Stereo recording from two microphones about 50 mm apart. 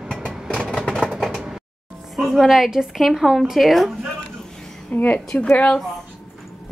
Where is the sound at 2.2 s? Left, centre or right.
Centre.